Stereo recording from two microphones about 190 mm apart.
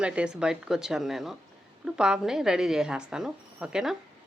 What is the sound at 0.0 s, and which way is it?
A woman's voice, 5° right (ahead or behind).